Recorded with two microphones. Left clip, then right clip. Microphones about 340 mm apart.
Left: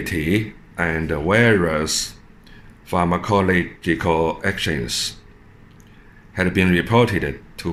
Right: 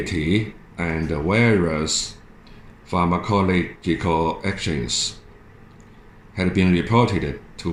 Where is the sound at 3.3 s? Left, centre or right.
Left.